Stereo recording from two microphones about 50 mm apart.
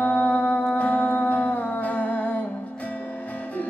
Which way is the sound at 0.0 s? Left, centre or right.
Left.